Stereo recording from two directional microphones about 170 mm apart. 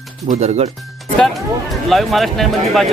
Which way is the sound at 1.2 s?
Centre (ahead or behind).